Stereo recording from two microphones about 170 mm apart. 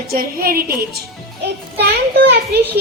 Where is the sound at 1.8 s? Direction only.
75° right (ahead or behind).